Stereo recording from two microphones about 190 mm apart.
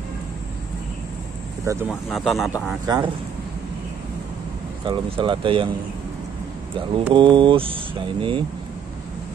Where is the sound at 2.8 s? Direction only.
20° right (ahead or behind).